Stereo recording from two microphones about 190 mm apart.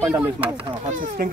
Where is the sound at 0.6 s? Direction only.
30° right (ahead or behind).